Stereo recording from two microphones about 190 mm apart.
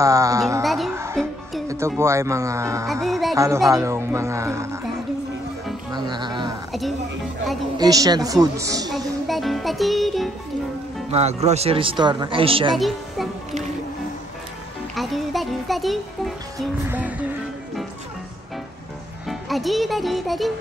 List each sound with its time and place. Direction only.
0.0 s music: 15° right (ahead or behind)
0.6 s music: centre (ahead or behind)
0.9 s music: 15° right (ahead or behind)
1.7 s speech: 15° right (ahead or behind)
2.9 s music: centre (ahead or behind)
3.3 s speech: 15° right (ahead or behind)
5.9 s music: 20° right (ahead or behind)
7.7 s speech: 20° right (ahead or behind)
9.3 s music: centre (ahead or behind)
11.1 s speech: 35° right (ahead or behind)
12.7 s a child's voice: centre (ahead or behind)
15.0 s music: centre (ahead or behind)
19.2 s a child's voice: centre (ahead or behind)